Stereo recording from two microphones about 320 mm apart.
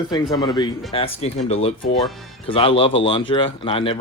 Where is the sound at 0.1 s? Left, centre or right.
Centre.